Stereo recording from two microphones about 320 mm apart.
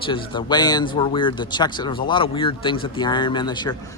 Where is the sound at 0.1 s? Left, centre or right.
Centre.